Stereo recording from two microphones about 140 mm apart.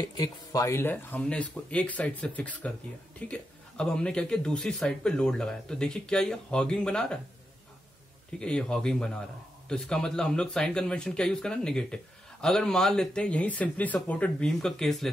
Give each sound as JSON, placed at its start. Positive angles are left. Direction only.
{"t": 0.0, "sound": "speech", "side_deg": 30}
{"t": 0.7, "sound": "speech", "side_deg": 15}
{"t": 8.4, "sound": "speech", "side_deg": 5}